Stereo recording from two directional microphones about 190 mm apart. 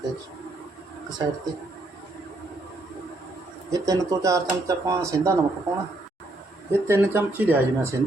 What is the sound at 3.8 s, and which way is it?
Speech, 20° right (ahead or behind).